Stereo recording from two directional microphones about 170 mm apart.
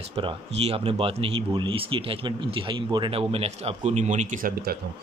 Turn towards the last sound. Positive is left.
turn(degrees=-60)  # may be behind; listen again after turning